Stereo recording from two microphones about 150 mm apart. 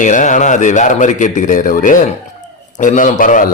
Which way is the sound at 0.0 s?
55° left (ahead or behind).